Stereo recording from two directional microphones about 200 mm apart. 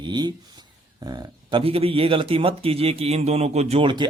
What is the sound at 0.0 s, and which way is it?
Speech, 20° right (ahead or behind).